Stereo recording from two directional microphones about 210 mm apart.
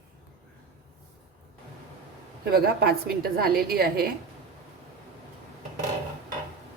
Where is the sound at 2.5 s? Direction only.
45° right (ahead or behind).